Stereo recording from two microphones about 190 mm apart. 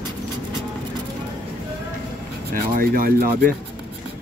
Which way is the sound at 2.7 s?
50° right (ahead or behind).